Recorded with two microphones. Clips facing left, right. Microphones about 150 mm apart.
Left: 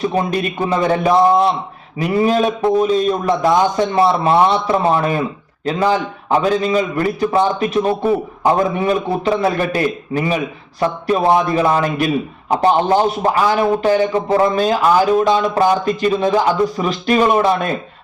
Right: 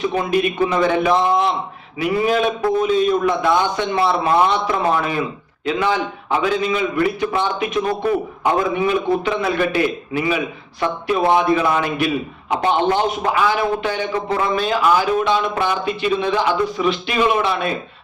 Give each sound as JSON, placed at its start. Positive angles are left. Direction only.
{"t": 0.0, "sound": "a man's voice", "side_deg": 40}